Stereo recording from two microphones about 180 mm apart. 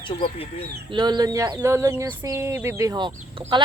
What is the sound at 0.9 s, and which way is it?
Speech, 25° right (ahead or behind).